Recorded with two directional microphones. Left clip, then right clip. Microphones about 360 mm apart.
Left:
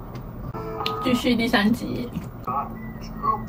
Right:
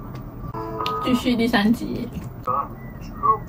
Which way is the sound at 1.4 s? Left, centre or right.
Centre.